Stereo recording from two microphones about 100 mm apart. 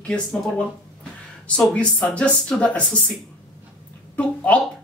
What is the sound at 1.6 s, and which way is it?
Speech, 5° left (ahead or behind).